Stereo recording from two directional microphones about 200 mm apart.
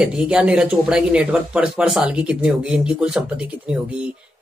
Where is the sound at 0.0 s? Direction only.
5° right (ahead or behind).